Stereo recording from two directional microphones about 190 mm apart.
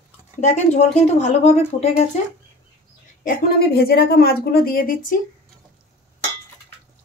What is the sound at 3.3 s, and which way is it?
A woman's voice, 55° left (ahead or behind).